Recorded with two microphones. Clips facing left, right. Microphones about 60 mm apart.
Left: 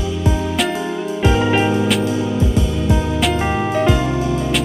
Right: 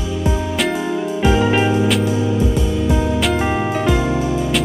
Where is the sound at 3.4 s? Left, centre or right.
Centre.